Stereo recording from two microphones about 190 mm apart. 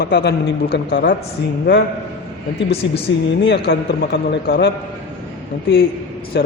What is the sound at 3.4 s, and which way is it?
A man's voice, 60° left (ahead or behind).